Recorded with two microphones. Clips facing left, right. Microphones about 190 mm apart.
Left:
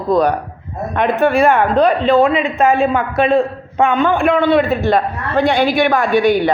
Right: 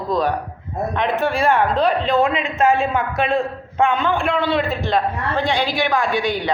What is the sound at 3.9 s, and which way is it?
A man's voice, 55° left (ahead or behind).